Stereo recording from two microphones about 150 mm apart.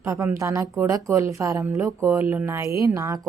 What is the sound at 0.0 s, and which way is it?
A woman's voice, 20° right (ahead or behind).